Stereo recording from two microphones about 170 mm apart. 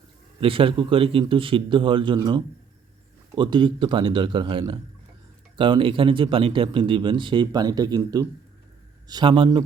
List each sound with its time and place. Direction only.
0.3 s a man's voice: 30° right (ahead or behind)